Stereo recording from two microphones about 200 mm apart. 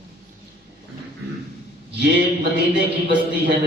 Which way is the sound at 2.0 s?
55° right (ahead or behind).